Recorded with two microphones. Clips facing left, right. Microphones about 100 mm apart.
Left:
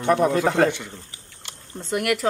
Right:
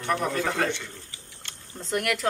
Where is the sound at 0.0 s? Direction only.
25° left (ahead or behind).